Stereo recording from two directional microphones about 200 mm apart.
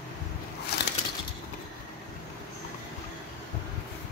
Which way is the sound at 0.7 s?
55° left (ahead or behind).